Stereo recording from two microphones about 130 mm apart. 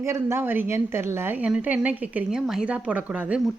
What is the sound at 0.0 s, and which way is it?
A woman's voice, 20° right (ahead or behind).